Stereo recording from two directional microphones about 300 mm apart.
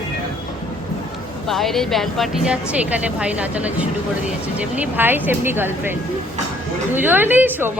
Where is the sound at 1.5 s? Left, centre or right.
Centre.